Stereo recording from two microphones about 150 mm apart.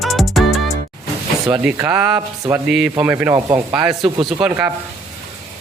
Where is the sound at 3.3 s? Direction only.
25° right (ahead or behind).